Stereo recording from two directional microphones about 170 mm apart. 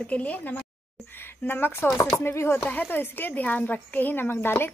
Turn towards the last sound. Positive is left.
turn(degrees=15)  # may be behind; listen again after turning